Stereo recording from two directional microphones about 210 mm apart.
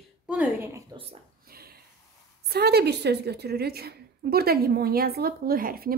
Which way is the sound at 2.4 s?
50° right (ahead or behind).